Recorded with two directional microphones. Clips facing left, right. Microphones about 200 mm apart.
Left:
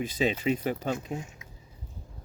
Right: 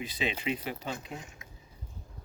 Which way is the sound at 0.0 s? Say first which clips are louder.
Left 6 dB; 45° left (ahead or behind).